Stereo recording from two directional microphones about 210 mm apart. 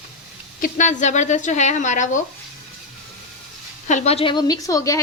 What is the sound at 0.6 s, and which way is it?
A woman's voice, 35° left (ahead or behind).